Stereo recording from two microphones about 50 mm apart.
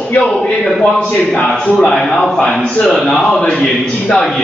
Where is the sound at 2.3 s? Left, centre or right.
Centre.